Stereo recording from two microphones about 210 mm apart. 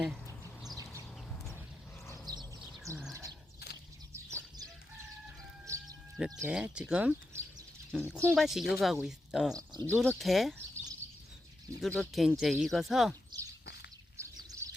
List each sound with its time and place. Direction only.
0.9 s a sound: 5° left (ahead or behind)
2.3 s bird: 20° right (ahead or behind)
3.1 s a sound: 15° right (ahead or behind)
4.1 s chicken: 15° right (ahead or behind)
5.6 s music: 15° right (ahead or behind)
6.4 s speech: 5° right (ahead or behind)
9.5 s speech: 15° right (ahead or behind)
10.2 s speech: centre (ahead or behind)
11.8 s speech: 5° left (ahead or behind)
14.2 s bird: 15° right (ahead or behind)